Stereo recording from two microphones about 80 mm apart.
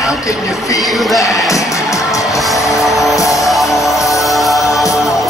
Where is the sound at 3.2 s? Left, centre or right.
Left.